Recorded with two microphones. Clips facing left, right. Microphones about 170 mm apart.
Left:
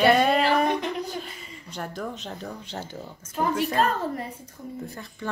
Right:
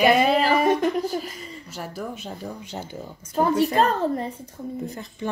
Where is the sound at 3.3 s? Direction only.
35° right (ahead or behind).